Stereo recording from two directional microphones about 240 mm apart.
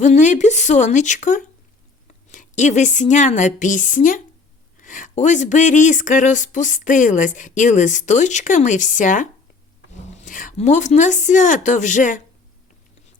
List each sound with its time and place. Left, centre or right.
0.0 s a woman's voice: left